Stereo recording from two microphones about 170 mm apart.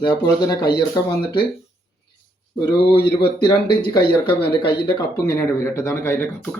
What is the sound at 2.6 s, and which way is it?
Speech, 30° left (ahead or behind).